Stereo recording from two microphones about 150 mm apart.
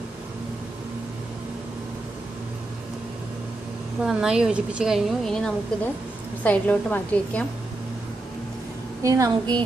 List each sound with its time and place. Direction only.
4.0 s a woman's voice: 5° right (ahead or behind)
9.0 s a woman's voice: 20° right (ahead or behind)